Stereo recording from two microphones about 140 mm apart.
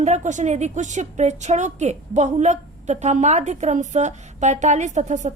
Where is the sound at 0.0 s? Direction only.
55° right (ahead or behind).